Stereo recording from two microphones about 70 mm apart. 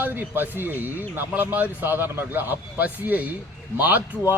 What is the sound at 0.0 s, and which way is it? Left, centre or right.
A man's voice, right.